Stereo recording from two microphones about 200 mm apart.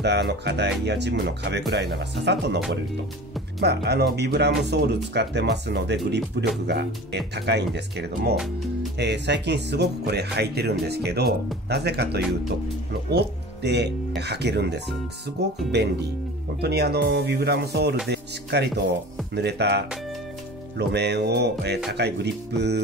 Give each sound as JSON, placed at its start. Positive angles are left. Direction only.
{"t": 0.0, "sound": "speech", "side_deg": -60}
{"t": 3.6, "sound": "speech", "side_deg": -55}